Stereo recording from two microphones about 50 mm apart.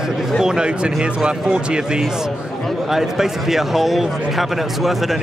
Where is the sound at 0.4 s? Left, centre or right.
Centre.